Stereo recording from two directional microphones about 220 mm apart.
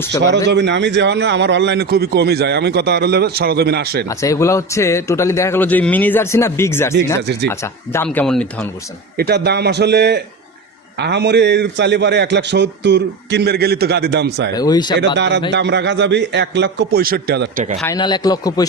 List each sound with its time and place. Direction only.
0.4 s a man's voice: 50° right (ahead or behind)
4.1 s a man's voice: 15° left (ahead or behind)
9.1 s a man's voice: 45° right (ahead or behind)
14.5 s a man's voice: 20° left (ahead or behind)
14.9 s a man's voice: 55° right (ahead or behind)
17.8 s a man's voice: 20° left (ahead or behind)